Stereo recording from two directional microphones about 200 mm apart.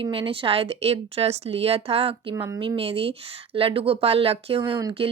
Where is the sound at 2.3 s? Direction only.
15° right (ahead or behind).